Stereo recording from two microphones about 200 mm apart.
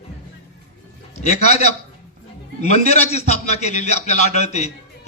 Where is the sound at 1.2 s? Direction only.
35° left (ahead or behind).